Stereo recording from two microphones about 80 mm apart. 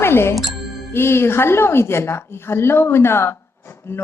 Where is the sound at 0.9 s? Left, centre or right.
Left.